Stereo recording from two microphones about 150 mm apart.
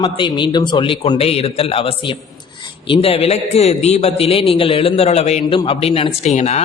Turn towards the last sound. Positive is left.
turn(degrees=45)  # may be behind; listen again after turning